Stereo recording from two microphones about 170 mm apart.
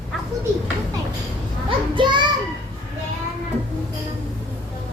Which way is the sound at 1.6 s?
30° right (ahead or behind).